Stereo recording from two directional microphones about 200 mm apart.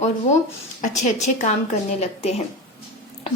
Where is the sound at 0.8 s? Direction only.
35° left (ahead or behind).